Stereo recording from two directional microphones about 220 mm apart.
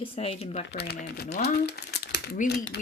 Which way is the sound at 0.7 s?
45° left (ahead or behind).